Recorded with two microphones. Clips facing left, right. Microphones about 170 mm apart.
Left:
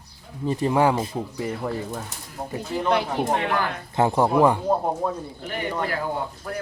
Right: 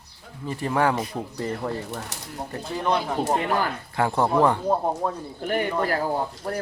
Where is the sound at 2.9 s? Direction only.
70° left (ahead or behind).